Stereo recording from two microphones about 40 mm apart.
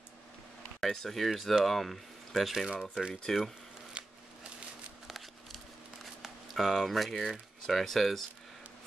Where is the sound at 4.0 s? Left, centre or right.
Right.